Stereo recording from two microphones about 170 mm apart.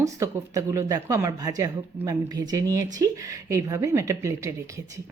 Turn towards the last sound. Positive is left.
turn(degrees=-20)  # may be behind; listen again after turning